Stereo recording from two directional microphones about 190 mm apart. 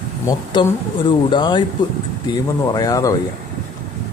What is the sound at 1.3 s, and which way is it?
Speech, 25° left (ahead or behind).